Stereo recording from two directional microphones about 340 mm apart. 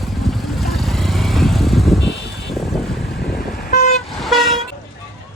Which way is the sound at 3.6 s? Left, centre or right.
Left.